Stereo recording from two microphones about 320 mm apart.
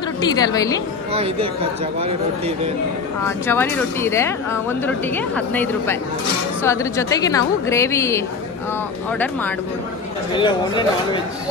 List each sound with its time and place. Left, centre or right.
0.2 s speech: centre
1.1 s speech: centre
3.3 s speech: centre
10.3 s speech: centre